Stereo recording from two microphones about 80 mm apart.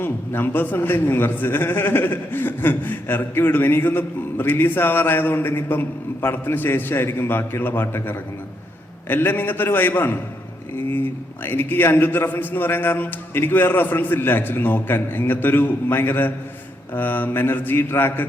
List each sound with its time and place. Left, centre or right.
0.0 s a man's voice: left